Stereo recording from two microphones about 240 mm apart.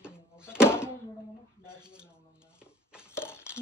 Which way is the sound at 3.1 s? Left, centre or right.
Centre.